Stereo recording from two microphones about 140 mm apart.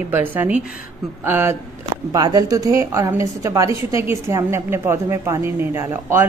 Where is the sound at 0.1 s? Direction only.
15° right (ahead or behind).